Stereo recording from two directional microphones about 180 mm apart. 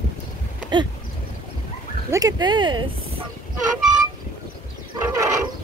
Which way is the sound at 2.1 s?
20° right (ahead or behind).